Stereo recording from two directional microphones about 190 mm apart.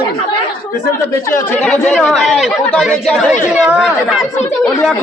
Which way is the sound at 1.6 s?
5° left (ahead or behind).